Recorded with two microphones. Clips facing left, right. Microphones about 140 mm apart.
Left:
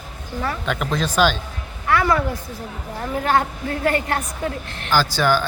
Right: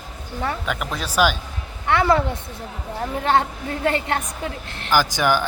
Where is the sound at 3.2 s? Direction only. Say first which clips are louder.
Even; 25° right (ahead or behind).